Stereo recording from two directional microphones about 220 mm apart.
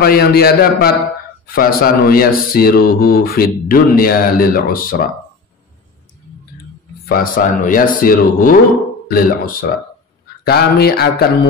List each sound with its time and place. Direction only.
0.0 s a man's voice: 45° left (ahead or behind)
7.1 s a man's voice: 40° left (ahead or behind)